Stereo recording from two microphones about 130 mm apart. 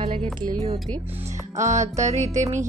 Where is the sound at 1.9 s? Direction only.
25° right (ahead or behind).